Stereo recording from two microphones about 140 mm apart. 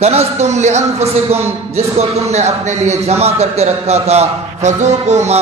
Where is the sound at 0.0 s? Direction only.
50° right (ahead or behind).